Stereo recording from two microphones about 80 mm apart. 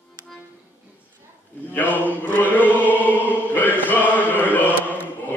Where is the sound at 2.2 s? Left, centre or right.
Left.